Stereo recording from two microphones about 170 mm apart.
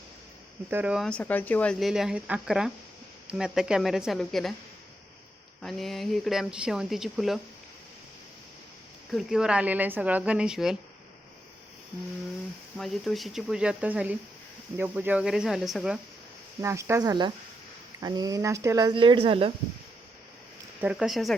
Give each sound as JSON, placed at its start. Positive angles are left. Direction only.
{"t": 0.7, "sound": "speech", "side_deg": -10}
{"t": 1.8, "sound": "speech", "side_deg": -5}
{"t": 5.6, "sound": "speech", "side_deg": 0}
{"t": 9.1, "sound": "a woman's voice", "side_deg": -5}
{"t": 12.7, "sound": "speech", "side_deg": 0}
{"t": 16.6, "sound": "a woman's voice", "side_deg": -15}
{"t": 20.8, "sound": "speech", "side_deg": -5}